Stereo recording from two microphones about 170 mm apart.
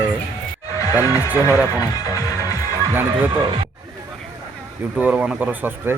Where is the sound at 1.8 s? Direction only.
20° left (ahead or behind).